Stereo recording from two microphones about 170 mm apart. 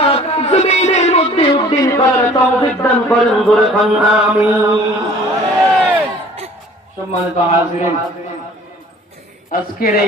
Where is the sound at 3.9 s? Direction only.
5° right (ahead or behind).